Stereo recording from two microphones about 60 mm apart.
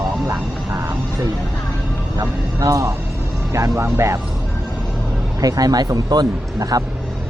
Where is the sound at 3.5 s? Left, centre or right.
Right.